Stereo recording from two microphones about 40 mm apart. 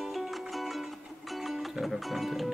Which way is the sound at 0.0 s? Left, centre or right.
Centre.